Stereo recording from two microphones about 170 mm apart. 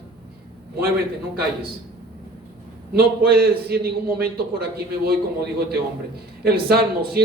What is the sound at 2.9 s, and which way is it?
A man's voice, 65° right (ahead or behind).